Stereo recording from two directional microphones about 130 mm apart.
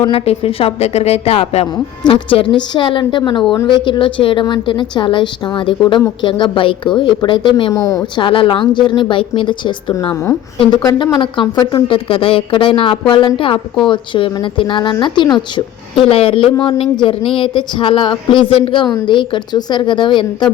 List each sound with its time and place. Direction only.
0.0 s a woman's voice: 45° left (ahead or behind); by 8.2 s 25° left (ahead or behind)
8.2 s a woman's voice: 40° left (ahead or behind)